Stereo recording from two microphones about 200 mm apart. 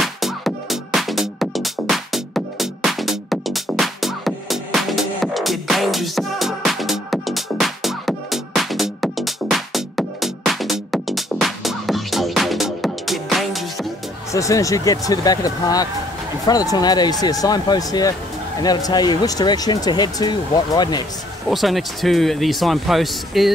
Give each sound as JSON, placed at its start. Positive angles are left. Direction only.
{"t": 0.0, "sound": "music", "side_deg": 0}
{"t": 14.3, "sound": "speech", "side_deg": 15}
{"t": 21.5, "sound": "speech", "side_deg": 0}